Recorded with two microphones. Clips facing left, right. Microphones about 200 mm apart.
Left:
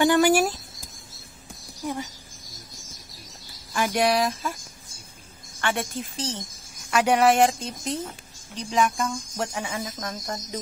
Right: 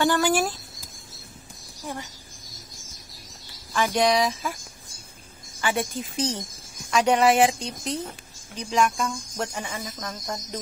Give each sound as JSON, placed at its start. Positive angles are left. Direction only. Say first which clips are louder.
{"t": 0.0, "sound": "speech", "louder": "left 3 dB", "side_deg": 15}
{"t": 3.7, "sound": "speech", "louder": "right 1 dB", "side_deg": 10}
{"t": 5.6, "sound": "speech", "louder": "right 1 dB", "side_deg": 0}
{"t": 6.1, "sound": "speech", "louder": "right 6 dB", "side_deg": -15}
{"t": 6.9, "sound": "speech", "louder": "even", "side_deg": 5}